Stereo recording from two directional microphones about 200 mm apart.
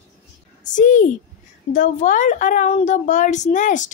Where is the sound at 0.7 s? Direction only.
40° left (ahead or behind).